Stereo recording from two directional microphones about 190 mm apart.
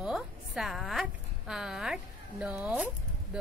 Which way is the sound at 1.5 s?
Centre (ahead or behind).